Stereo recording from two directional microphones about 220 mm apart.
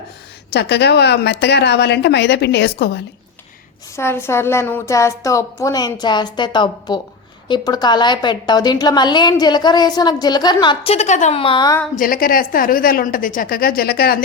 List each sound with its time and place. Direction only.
0.5 s a woman's voice: 50° left (ahead or behind)
3.9 s a woman's voice: 10° left (ahead or behind)
11.9 s a woman's voice: 40° left (ahead or behind)